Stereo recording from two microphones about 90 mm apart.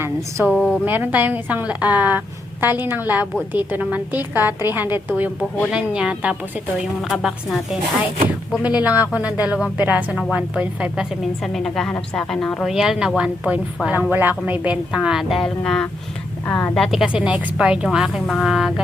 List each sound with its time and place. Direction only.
0.5 s a woman's voice: 5° left (ahead or behind)
0.9 s a woman's voice: 20° right (ahead or behind)
5.7 s a woman's voice: 10° right (ahead or behind)
8.6 s speech: 15° right (ahead or behind)
11.2 s a woman's voice: centre (ahead or behind)
12.6 s speech: 5° right (ahead or behind)
13.9 s a woman's voice: 20° right (ahead or behind); by 17.1 s centre (ahead or behind)
17.1 s a woman's voice: 10° right (ahead or behind)